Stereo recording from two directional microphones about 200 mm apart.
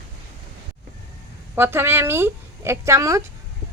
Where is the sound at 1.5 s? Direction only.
10° right (ahead or behind).